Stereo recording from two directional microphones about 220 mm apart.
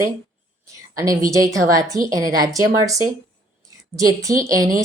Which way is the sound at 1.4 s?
15° right (ahead or behind).